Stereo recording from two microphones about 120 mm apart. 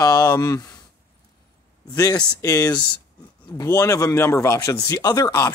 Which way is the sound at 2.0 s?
30° left (ahead or behind).